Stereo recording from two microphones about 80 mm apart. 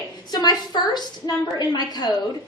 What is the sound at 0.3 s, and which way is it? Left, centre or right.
A woman's voice, left.